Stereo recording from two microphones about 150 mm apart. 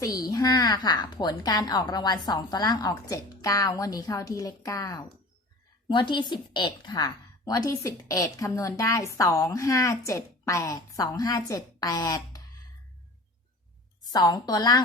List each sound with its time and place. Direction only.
0.0 s a woman's voice: 25° left (ahead or behind)
14.1 s a woman's voice: 25° left (ahead or behind)